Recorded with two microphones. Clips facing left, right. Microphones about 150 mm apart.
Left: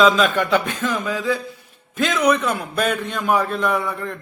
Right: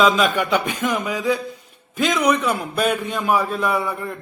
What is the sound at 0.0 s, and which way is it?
A man's voice, 10° right (ahead or behind).